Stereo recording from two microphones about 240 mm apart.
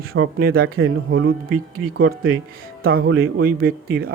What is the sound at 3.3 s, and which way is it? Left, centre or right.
Speech, right.